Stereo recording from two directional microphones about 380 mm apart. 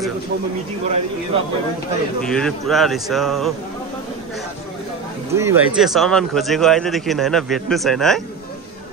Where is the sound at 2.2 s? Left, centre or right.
Centre.